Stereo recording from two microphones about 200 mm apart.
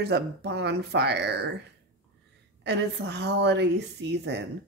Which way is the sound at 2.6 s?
55° right (ahead or behind).